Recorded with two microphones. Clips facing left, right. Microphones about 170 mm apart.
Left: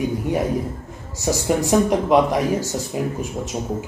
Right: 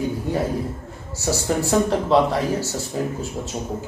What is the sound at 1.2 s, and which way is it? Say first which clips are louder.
A man's voice: left 2 dB; 15° left (ahead or behind).